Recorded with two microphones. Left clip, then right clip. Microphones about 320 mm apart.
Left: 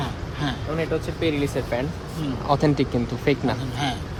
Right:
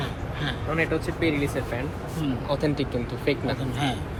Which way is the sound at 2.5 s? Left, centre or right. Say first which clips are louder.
Left 6 dB; left.